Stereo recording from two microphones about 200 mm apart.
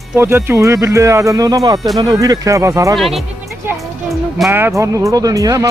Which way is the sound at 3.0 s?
Centre (ahead or behind).